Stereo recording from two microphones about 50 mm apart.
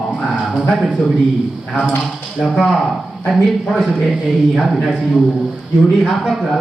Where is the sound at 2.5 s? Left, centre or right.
Centre.